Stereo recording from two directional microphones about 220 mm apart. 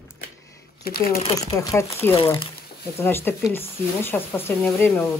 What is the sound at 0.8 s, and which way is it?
Speech, 40° left (ahead or behind).